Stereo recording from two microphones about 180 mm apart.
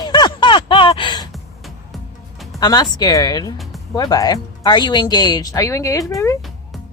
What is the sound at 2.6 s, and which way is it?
Speech, 20° left (ahead or behind).